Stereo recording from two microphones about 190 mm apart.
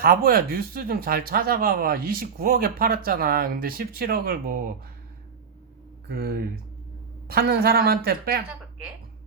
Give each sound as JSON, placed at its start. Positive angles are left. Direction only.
{"t": 0.0, "sound": "speech", "side_deg": -50}
{"t": 6.1, "sound": "speech", "side_deg": -50}